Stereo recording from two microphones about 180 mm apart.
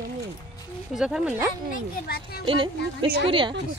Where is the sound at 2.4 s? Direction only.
30° right (ahead or behind).